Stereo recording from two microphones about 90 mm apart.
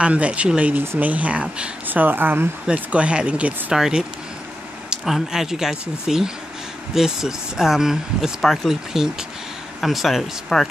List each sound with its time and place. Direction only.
0.0 s speech: 15° right (ahead or behind)
2.6 s speech: 10° right (ahead or behind)
4.8 s speech: 5° right (ahead or behind)